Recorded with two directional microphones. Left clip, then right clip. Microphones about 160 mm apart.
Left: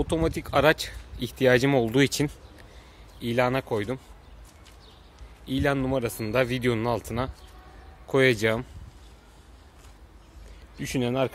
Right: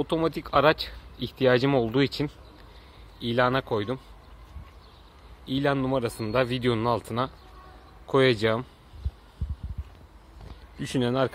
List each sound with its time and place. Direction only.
0.0 s speech: 15° left (ahead or behind); by 2.3 s 35° left (ahead or behind)
3.2 s a man's voice: 15° left (ahead or behind)
5.4 s a man's voice: 10° left (ahead or behind)
10.8 s speech: centre (ahead or behind)